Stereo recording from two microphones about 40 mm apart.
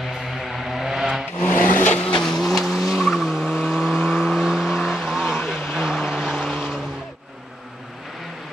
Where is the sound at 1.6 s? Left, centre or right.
Left.